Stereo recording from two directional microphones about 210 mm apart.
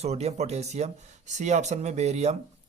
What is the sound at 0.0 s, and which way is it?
Speech, 30° right (ahead or behind).